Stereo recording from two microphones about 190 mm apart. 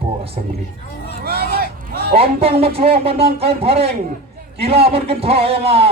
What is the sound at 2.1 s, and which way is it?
A man's voice, 30° right (ahead or behind).